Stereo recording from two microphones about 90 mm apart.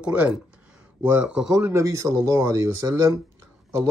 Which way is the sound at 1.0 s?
15° right (ahead or behind).